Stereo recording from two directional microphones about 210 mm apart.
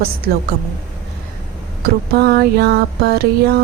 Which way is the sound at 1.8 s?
45° right (ahead or behind).